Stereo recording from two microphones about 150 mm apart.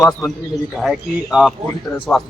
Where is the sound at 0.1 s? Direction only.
5° left (ahead or behind).